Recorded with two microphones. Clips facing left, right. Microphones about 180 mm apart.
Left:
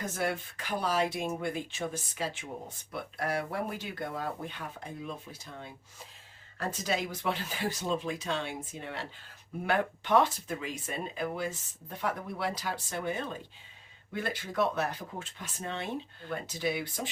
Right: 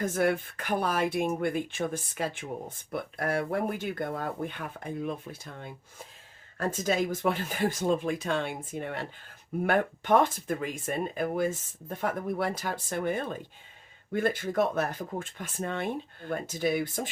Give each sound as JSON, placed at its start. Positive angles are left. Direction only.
{"t": 0.0, "sound": "speech", "side_deg": -50}